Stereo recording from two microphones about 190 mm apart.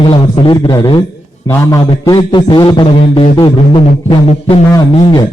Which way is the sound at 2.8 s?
30° left (ahead or behind).